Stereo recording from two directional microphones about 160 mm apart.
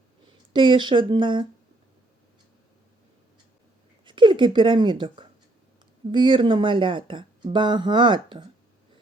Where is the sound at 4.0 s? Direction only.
30° right (ahead or behind).